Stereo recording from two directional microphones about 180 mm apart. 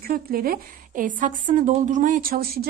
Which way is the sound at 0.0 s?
55° right (ahead or behind).